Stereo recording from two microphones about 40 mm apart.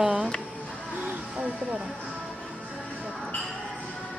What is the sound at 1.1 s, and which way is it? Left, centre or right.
Speech, right.